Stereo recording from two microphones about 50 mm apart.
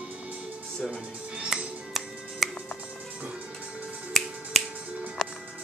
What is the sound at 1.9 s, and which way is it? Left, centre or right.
Music, centre.